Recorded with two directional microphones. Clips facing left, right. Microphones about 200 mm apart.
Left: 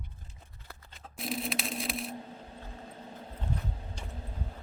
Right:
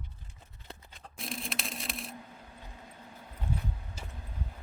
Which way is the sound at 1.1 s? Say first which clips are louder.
Left 5 dB; centre (ahead or behind).